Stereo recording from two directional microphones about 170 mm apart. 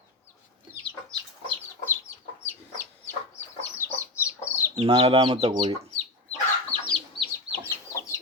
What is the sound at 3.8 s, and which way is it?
Chicken, 15° left (ahead or behind).